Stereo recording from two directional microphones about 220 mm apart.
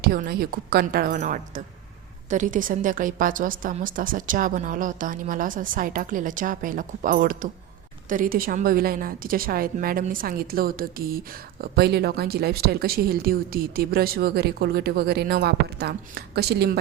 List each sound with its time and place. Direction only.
0.0 s a woman's voice: 45° right (ahead or behind)